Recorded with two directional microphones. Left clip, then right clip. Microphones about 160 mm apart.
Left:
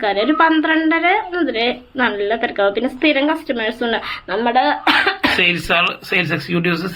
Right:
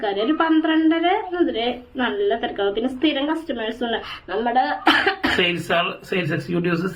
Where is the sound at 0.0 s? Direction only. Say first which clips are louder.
Left 6 dB; 20° left (ahead or behind).